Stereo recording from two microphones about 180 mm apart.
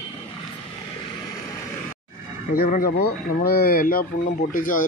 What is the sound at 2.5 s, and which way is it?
Speech, 55° left (ahead or behind).